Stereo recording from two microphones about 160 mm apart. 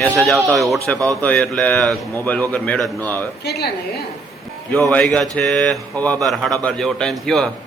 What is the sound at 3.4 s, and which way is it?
Speech, 85° left.